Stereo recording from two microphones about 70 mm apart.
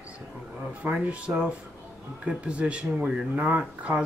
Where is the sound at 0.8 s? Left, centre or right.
Centre.